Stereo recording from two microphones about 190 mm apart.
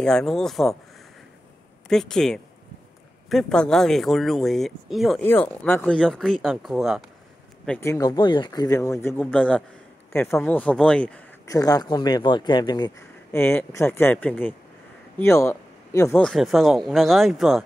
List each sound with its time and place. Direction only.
0.0 s speech: 5° left (ahead or behind)
1.9 s speech: 5° left (ahead or behind)
5.2 s speech: 10° left (ahead or behind)
7.6 s speech: 10° left (ahead or behind)
11.4 s speech: 20° left (ahead or behind)
16.2 s speech: centre (ahead or behind)